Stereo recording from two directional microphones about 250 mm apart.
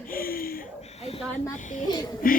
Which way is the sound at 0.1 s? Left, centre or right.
Left.